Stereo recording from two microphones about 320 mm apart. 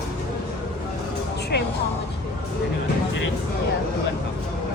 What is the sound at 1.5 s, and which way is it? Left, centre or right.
Music, left.